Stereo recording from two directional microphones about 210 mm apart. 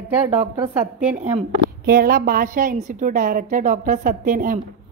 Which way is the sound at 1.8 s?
45° right (ahead or behind).